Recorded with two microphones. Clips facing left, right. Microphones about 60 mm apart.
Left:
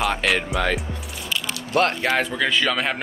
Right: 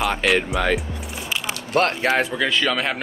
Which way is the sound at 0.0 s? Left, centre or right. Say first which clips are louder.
Right 2 dB; centre.